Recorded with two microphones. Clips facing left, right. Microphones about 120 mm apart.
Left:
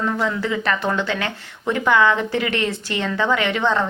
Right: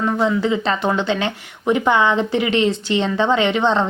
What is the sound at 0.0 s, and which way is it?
Speech, 20° right (ahead or behind).